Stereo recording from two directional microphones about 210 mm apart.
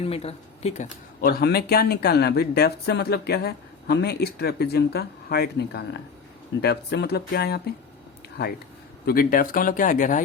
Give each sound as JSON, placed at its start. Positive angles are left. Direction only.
{"t": 0.0, "sound": "speech", "side_deg": 30}
{"t": 1.2, "sound": "speech", "side_deg": 45}
{"t": 9.0, "sound": "speech", "side_deg": 45}